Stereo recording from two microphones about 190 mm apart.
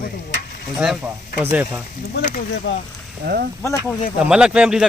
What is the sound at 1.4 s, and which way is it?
Speech, 10° right (ahead or behind).